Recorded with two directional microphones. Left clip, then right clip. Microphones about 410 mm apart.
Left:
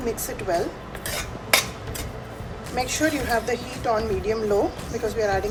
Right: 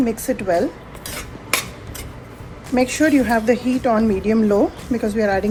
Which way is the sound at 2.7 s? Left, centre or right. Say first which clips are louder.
Right 7 dB; centre.